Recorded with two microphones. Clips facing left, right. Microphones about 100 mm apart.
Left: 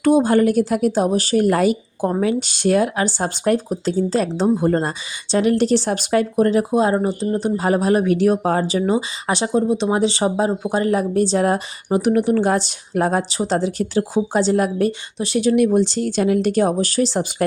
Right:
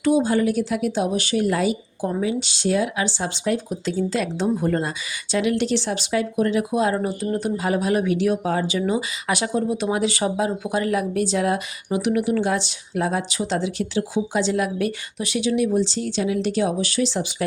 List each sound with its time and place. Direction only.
0.0 s a woman's voice: 50° left (ahead or behind); by 7.5 s 25° left (ahead or behind)
7.5 s speech: 40° left (ahead or behind)